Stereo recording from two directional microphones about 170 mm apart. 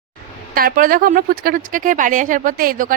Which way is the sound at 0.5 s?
55° right (ahead or behind).